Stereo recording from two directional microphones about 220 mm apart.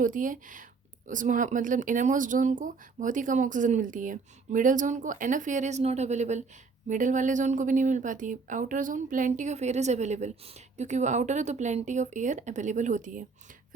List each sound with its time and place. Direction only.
0.0 s speech: 35° right (ahead or behind)